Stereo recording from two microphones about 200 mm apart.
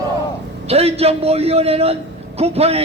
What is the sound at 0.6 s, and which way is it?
A man's voice, 30° right (ahead or behind).